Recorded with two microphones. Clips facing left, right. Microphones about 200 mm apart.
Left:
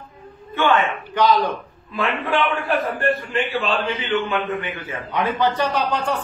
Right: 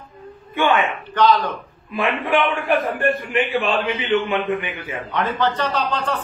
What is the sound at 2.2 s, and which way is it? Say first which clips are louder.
A man's voice: right 2 dB; 15° right (ahead or behind).